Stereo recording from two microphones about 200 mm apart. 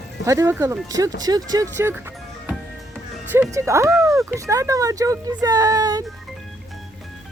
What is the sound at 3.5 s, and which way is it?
Speech, 15° right (ahead or behind).